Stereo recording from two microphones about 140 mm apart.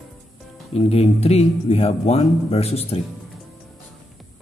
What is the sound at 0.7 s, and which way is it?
Speech, 45° left (ahead or behind).